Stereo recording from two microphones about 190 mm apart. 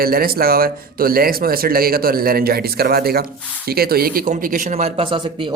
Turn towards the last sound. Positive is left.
turn(degrees=-30)  # may be behind; listen again after turning